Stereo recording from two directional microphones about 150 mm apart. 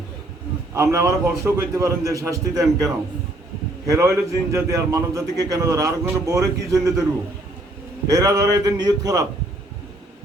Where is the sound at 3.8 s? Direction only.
20° right (ahead or behind).